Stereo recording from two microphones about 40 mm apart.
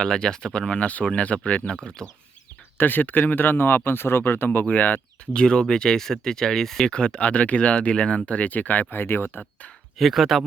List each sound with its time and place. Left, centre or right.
0.0 s speech: centre
0.9 s speech: left
1.7 s speech: centre
2.7 s speech: left
4.7 s speech: left
5.2 s speech: left
6.9 s speech: left
8.9 s speech: left
10.0 s speech: centre